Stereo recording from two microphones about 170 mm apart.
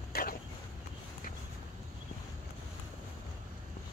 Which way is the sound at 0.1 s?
60° left (ahead or behind).